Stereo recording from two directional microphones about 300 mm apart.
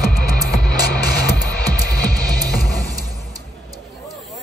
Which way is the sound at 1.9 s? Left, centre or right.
Left.